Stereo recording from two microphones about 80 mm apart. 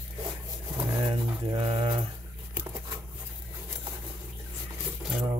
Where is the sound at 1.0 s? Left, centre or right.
Right.